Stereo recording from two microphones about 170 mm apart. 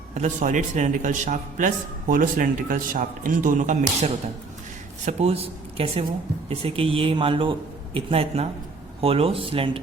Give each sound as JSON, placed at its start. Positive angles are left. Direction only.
{"t": 0.1, "sound": "a man's voice", "side_deg": -45}